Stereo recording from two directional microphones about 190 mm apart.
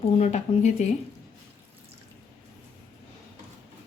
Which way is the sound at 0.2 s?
35° left (ahead or behind).